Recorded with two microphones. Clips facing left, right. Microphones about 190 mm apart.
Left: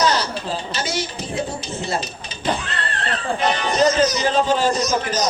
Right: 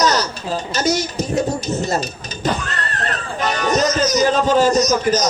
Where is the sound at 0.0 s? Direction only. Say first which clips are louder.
Right 2 dB; 40° right (ahead or behind).